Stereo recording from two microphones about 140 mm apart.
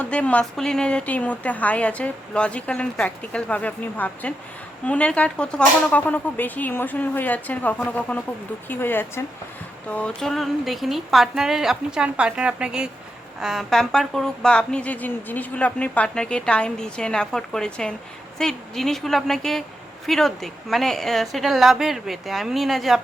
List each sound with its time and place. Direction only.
0.0 s a woman's voice: 10° left (ahead or behind)
10.2 s speech: centre (ahead or behind)